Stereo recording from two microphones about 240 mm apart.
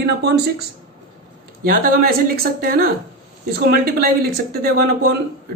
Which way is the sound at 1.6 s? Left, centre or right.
Right.